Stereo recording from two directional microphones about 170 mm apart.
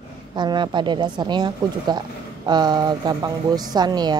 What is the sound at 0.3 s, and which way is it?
Speech, 25° right (ahead or behind).